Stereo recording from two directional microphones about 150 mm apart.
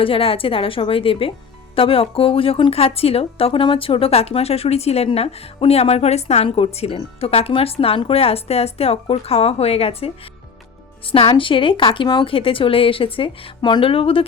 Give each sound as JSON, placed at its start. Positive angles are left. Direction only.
{"t": 0.0, "sound": "speech", "side_deg": 40}
{"t": 11.1, "sound": "speech", "side_deg": 35}